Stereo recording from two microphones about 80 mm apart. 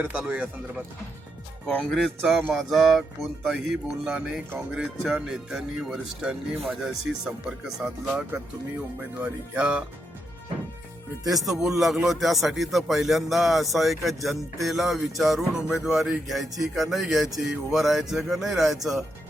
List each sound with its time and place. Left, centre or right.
0.0 s speech: centre
1.6 s speech: centre
2.0 s speech: centre
11.3 s speech: centre